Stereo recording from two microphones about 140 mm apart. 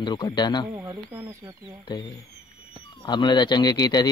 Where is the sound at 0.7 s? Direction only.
20° right (ahead or behind).